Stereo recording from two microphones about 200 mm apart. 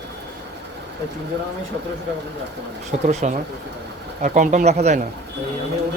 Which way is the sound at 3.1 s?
35° right (ahead or behind).